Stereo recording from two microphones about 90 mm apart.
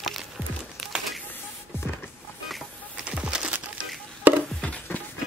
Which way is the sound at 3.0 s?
10° right (ahead or behind).